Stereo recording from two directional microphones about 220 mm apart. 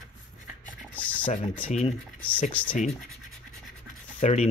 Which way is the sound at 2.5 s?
5° left (ahead or behind).